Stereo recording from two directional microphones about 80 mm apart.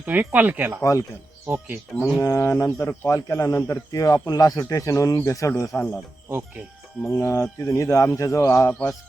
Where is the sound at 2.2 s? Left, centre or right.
Left.